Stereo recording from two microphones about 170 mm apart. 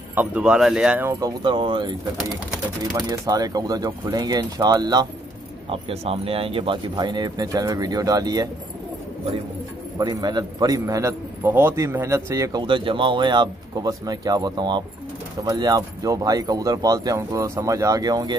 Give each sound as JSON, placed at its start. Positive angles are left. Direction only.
{"t": 0.1, "sound": "speech", "side_deg": -10}
{"t": 1.2, "sound": "a man's voice", "side_deg": -30}
{"t": 9.9, "sound": "a man's voice", "side_deg": -25}